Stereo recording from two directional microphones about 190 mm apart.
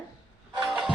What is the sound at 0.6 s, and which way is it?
Music, centre (ahead or behind).